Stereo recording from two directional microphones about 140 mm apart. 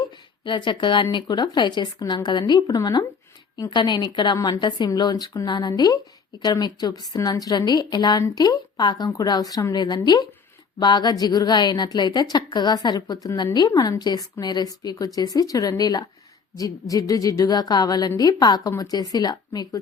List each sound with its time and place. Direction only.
0.4 s a woman's voice: 35° left (ahead or behind)